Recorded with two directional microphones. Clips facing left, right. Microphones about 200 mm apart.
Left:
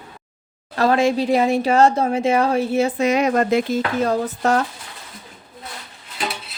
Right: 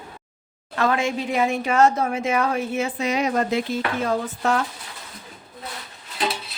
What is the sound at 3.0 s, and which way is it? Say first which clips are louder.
Speech: left 2 dB; 50° left (ahead or behind).